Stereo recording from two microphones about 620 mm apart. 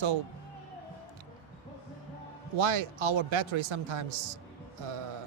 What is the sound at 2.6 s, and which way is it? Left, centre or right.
A man's voice, right.